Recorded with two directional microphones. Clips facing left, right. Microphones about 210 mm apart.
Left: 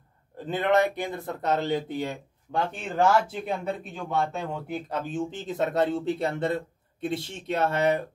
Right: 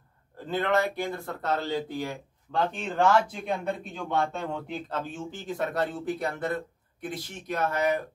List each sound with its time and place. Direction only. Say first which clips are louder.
0.5 s speech: left 3 dB; 20° left (ahead or behind)
2.5 s speech: even; 10° left (ahead or behind); by 8.0 s 25° left (ahead or behind)